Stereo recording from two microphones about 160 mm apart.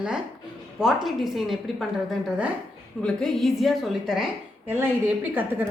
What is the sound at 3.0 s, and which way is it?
A woman's voice, 5° left (ahead or behind).